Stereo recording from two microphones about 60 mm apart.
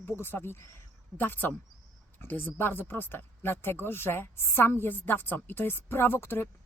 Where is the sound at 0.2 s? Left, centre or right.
Left.